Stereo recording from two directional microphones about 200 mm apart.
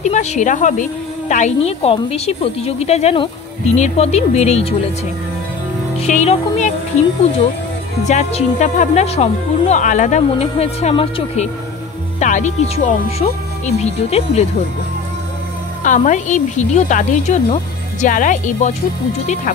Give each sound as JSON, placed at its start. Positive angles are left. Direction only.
{"t": 0.0, "sound": "a woman's voice", "side_deg": 35}
{"t": 5.9, "sound": "music", "side_deg": 35}
{"t": 8.0, "sound": "a woman's voice", "side_deg": 35}
{"t": 15.8, "sound": "a woman's voice", "side_deg": 40}